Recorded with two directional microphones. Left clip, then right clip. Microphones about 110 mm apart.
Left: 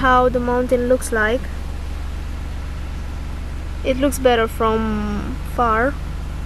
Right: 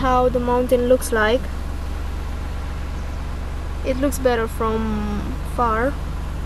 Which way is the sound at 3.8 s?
20° left (ahead or behind).